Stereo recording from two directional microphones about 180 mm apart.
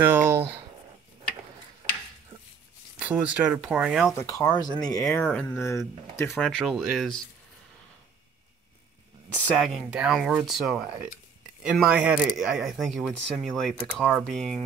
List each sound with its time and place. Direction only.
0.0 s speech: 10° right (ahead or behind)
3.0 s speech: 5° right (ahead or behind)
4.2 s speech: 20° left (ahead or behind)
5.2 s speech: 10° left (ahead or behind)
6.4 s speech: 5° left (ahead or behind)
9.6 s speech: 5° right (ahead or behind)